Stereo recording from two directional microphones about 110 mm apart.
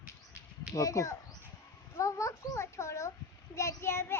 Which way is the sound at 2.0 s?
30° left (ahead or behind).